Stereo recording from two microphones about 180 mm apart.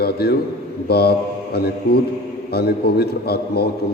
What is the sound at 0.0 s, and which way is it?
Mantra, 60° left (ahead or behind).